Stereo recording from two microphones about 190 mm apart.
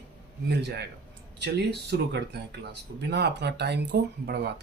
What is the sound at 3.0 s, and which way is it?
Speech, 60° right (ahead or behind).